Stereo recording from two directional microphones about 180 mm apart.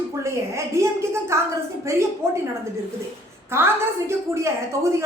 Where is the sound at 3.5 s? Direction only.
15° right (ahead or behind).